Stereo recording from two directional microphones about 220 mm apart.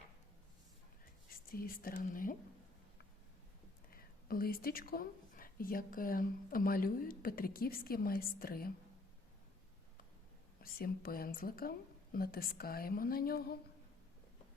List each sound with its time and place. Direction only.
1.5 s speech: 40° left (ahead or behind)
3.9 s speech: 40° left (ahead or behind)
10.6 s a woman's voice: 40° left (ahead or behind)